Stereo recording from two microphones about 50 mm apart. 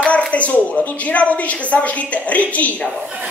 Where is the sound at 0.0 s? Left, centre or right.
Left.